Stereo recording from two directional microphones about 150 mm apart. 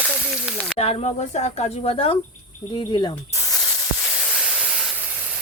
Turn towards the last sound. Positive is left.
turn(degrees=0)  # may be behind; listen again after turning